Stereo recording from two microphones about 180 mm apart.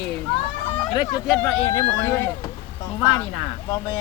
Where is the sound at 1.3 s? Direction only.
5° left (ahead or behind).